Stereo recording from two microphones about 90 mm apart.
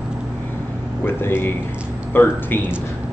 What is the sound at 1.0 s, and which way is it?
A man's voice, 25° left (ahead or behind).